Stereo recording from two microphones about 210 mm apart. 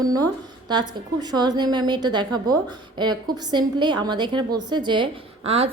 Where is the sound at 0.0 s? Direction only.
20° right (ahead or behind).